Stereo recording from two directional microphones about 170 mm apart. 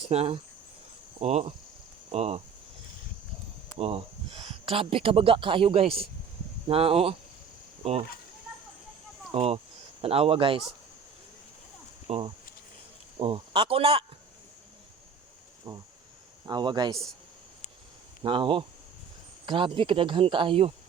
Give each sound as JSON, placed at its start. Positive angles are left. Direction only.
{"t": 0.1, "sound": "speech", "side_deg": -40}
{"t": 3.8, "sound": "speech", "side_deg": -35}
{"t": 9.3, "sound": "speech", "side_deg": -35}
{"t": 12.0, "sound": "speech", "side_deg": -35}
{"t": 15.7, "sound": "speech", "side_deg": -20}
{"t": 18.2, "sound": "speech", "side_deg": -30}